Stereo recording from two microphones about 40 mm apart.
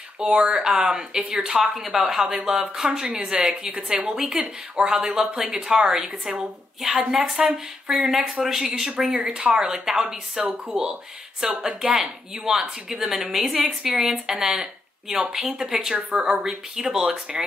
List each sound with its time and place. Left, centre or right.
0.2 s speech: right
1.8 s speech: centre